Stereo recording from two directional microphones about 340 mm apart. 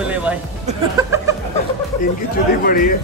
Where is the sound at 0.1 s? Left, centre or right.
Centre.